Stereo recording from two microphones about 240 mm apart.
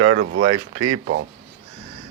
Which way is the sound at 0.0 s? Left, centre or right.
Right.